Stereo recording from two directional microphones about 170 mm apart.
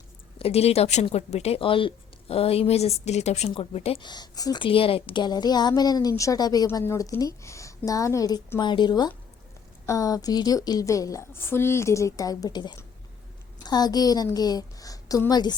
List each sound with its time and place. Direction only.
0.3 s speech: 35° left (ahead or behind)